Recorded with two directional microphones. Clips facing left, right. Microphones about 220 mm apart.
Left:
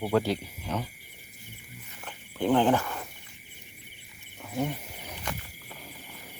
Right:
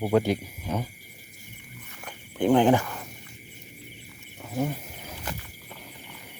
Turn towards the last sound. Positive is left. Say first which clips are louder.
# right 1 dB
turn(degrees=-5)  # may be behind; listen again after turning